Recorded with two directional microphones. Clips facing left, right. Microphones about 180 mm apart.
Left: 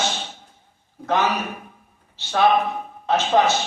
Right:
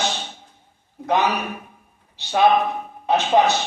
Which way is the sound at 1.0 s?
15° right (ahead or behind).